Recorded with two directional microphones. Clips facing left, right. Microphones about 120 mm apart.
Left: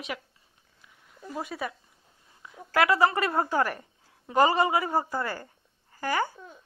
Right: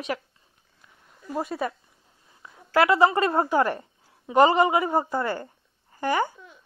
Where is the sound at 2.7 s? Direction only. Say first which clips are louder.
Right 3 dB; 25° right (ahead or behind).